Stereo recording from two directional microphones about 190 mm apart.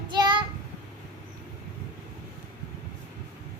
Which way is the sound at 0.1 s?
25° right (ahead or behind).